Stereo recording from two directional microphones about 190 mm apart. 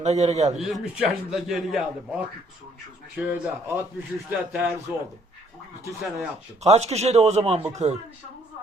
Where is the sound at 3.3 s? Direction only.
10° right (ahead or behind).